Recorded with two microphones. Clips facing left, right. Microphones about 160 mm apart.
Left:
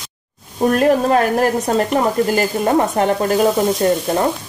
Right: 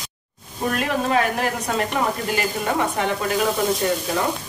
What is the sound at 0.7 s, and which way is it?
Speech, 45° left (ahead or behind).